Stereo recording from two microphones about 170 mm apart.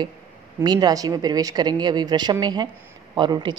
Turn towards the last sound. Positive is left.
turn(degrees=-25)  # may be behind; listen again after turning